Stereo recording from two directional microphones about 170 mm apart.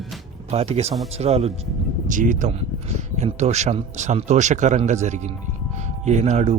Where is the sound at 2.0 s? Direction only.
50° right (ahead or behind).